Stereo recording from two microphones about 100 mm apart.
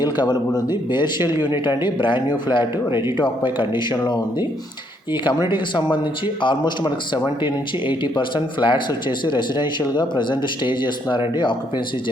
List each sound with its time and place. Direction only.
0.0 s speech: 45° left (ahead or behind)
3.2 s speech: 50° left (ahead or behind)
5.5 s speech: 50° left (ahead or behind)